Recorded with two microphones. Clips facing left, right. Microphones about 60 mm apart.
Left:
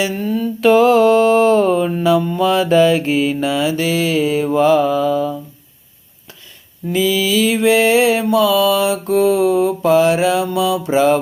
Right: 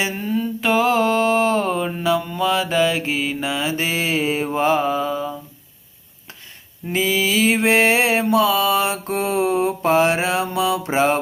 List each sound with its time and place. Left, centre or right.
0.2 s mantra: centre
0.9 s a sound: right
1.8 s mantra: centre
3.7 s mantra: right
6.8 s mantra: right